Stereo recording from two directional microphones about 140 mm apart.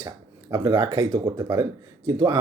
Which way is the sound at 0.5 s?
30° right (ahead or behind).